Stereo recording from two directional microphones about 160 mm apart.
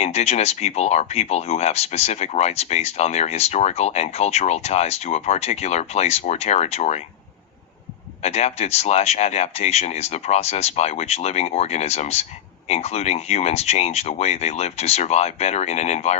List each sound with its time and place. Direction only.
0.0 s speech: 40° left (ahead or behind)
8.2 s speech: 40° left (ahead or behind)